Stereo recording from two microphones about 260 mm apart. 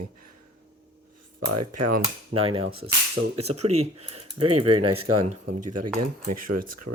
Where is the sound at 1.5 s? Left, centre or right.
Right.